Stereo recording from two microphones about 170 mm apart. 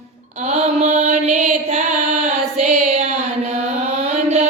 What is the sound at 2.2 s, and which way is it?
Child singing, 45° right (ahead or behind).